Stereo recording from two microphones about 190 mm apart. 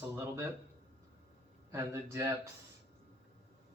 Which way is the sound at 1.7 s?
15° right (ahead or behind).